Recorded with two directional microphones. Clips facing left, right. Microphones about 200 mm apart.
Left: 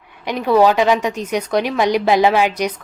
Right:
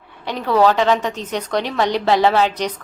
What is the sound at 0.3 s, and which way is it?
A woman's voice, 15° left (ahead or behind).